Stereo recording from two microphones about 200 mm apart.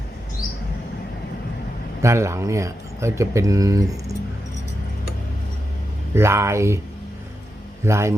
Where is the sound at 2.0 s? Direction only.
15° right (ahead or behind).